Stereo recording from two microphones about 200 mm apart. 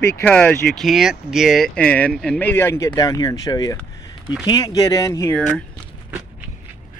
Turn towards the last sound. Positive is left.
turn(degrees=15)  # may be behind; listen again after turning